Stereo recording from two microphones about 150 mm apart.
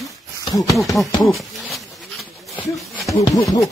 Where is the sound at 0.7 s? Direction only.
Centre (ahead or behind).